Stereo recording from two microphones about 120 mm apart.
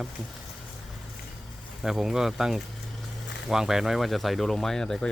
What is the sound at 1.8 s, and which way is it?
Speech, 5° right (ahead or behind).